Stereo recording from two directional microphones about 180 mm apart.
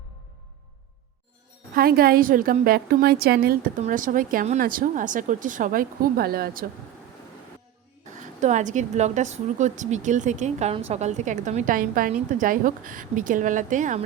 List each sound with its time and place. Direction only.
1.7 s a woman's voice: 55° right (ahead or behind)
8.4 s a woman's voice: 40° right (ahead or behind)